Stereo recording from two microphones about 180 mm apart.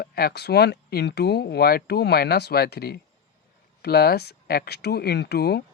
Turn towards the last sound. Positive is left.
turn(degrees=65)  # may be behind; listen again after turning